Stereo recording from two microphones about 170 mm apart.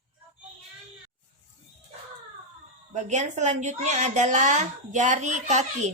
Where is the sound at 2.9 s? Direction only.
45° right (ahead or behind).